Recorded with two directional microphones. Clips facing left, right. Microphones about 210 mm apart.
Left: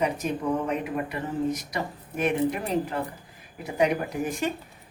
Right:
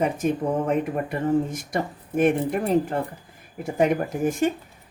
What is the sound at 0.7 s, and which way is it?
Speech, 50° right (ahead or behind).